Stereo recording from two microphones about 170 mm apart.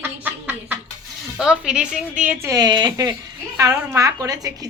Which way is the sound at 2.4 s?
20° right (ahead or behind).